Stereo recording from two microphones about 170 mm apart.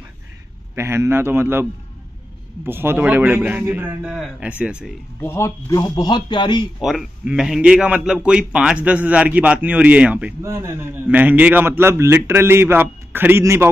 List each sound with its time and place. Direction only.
0.7 s a man's voice: 15° right (ahead or behind)
5.2 s speech: 15° left (ahead or behind)
6.8 s a man's voice: centre (ahead or behind)